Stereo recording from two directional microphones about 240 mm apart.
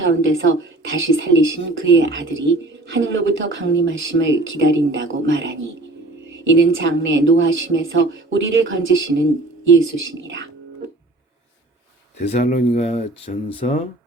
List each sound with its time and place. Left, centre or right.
0.0 s a woman's voice: right
12.2 s speech: left